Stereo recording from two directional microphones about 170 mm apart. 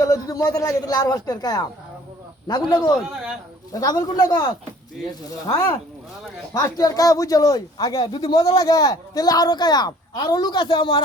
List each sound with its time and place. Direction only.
0.0 s speech: 20° left (ahead or behind)